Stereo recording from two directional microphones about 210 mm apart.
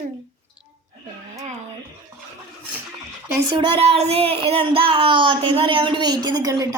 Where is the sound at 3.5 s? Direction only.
25° right (ahead or behind).